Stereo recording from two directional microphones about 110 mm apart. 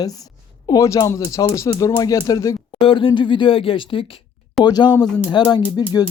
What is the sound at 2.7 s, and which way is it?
Speech, 55° left (ahead or behind).